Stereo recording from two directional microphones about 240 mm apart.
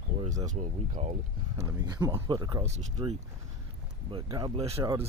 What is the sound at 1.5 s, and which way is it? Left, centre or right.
Speech, centre.